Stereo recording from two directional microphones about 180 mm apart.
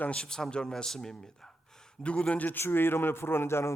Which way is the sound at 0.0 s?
5° left (ahead or behind).